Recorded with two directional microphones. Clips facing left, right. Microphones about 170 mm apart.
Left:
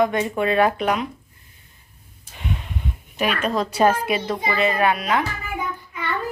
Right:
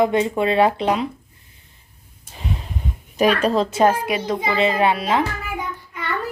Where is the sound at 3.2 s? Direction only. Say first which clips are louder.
Right 5 dB; 35° right (ahead or behind).